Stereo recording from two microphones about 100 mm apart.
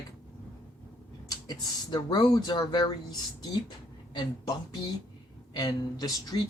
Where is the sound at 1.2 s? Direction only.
40° left (ahead or behind).